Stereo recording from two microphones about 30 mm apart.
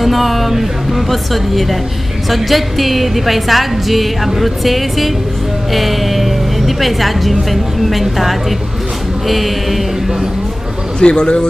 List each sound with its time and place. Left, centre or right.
0.0 s a woman's voice: centre
11.0 s a man's voice: left